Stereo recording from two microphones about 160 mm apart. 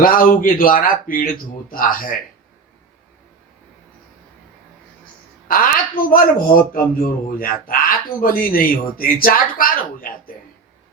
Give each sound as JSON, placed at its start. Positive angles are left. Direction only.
{"t": 0.0, "sound": "speech", "side_deg": 60}
{"t": 5.5, "sound": "speech", "side_deg": 60}